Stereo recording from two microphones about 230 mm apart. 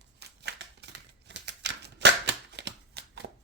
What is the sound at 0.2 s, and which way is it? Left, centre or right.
Scissors, right.